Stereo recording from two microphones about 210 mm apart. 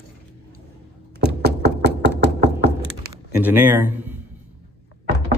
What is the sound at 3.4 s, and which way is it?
Speech, 10° right (ahead or behind).